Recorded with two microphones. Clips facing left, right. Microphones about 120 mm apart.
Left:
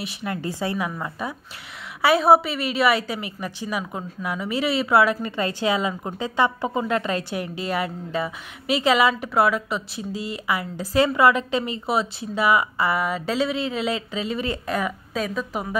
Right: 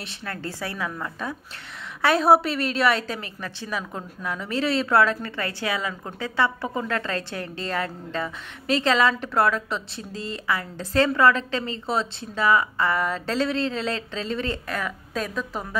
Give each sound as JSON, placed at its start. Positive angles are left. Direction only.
{"t": 0.0, "sound": "a woman's voice", "side_deg": 15}
{"t": 15.1, "sound": "a woman's voice", "side_deg": 5}